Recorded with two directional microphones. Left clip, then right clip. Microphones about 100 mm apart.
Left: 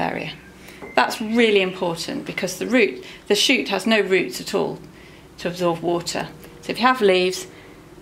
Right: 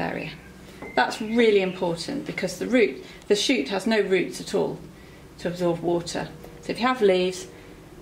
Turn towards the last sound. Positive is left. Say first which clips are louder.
# left 4 dB
turn(degrees=35)  # may be behind; listen again after turning